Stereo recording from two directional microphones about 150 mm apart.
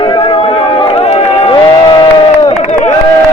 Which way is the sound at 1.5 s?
30° left (ahead or behind).